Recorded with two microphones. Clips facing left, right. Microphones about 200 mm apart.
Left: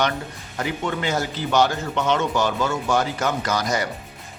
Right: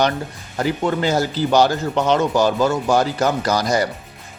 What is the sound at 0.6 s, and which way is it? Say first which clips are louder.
A man's voice: right 6 dB; 35° right (ahead or behind).